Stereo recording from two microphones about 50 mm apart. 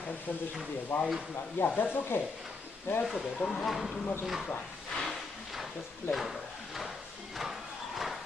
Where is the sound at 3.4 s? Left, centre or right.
Centre.